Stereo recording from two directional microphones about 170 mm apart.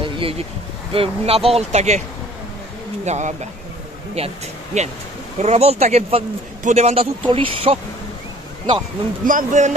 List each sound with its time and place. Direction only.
0.0 s a sound: 35° right (ahead or behind)
0.9 s a man's voice: 35° right (ahead or behind)
3.1 s a man's voice: 45° right (ahead or behind)
9.2 s speech: 55° right (ahead or behind)